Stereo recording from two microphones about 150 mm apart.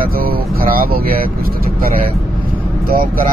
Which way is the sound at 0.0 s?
80° right.